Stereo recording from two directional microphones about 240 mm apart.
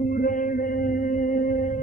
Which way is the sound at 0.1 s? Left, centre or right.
Left.